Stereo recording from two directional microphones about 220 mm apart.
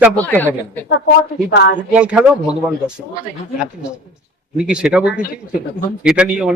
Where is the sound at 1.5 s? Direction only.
50° left (ahead or behind).